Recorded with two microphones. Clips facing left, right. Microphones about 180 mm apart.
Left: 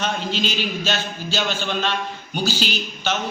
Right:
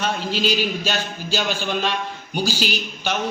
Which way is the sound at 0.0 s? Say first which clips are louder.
Right 1 dB; 10° right (ahead or behind).